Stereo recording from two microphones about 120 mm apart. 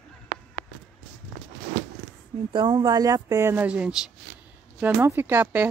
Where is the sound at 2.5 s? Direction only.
40° right (ahead or behind).